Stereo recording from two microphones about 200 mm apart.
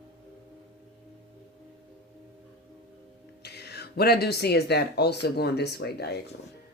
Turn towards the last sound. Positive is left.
turn(degrees=55)  # may be behind; listen again after turning